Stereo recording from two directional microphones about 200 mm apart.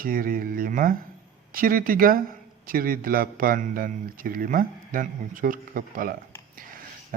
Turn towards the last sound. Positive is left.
turn(degrees=-45)  # may be behind; listen again after turning